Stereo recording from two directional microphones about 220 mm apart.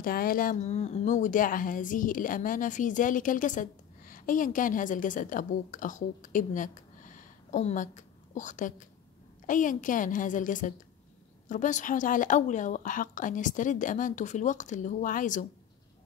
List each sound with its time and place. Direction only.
0.0 s a woman's voice: 40° left (ahead or behind)